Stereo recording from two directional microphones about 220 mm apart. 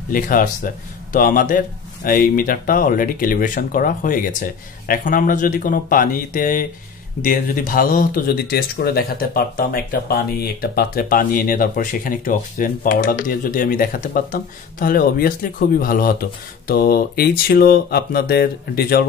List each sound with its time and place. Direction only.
0.1 s speech: 40° left (ahead or behind)